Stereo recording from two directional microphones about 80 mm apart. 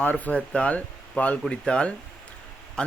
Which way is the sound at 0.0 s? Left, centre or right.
Centre.